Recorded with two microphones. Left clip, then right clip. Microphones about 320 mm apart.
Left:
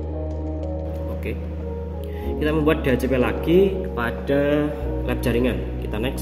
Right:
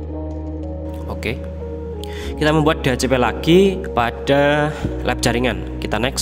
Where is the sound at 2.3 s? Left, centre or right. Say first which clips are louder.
Right 4 dB; right.